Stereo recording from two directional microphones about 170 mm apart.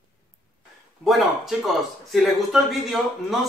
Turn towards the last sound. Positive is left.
turn(degrees=0)  # may be behind; listen again after turning